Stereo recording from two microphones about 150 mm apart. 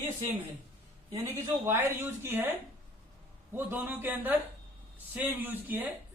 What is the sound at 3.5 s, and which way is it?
Speech, 10° right (ahead or behind).